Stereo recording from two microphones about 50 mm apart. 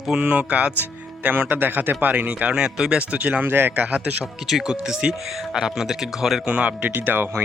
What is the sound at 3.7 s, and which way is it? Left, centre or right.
Speech, right.